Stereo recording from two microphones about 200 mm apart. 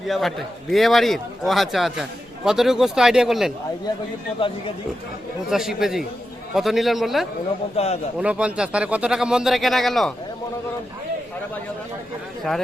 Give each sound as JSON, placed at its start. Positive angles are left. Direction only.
{"t": 0.1, "sound": "a man's voice", "side_deg": 0}
{"t": 5.5, "sound": "a man's voice", "side_deg": 0}
{"t": 7.8, "sound": "a man's voice", "side_deg": 30}
{"t": 8.2, "sound": "a man's voice", "side_deg": -5}